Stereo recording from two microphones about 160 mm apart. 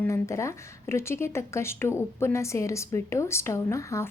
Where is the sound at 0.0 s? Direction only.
15° left (ahead or behind).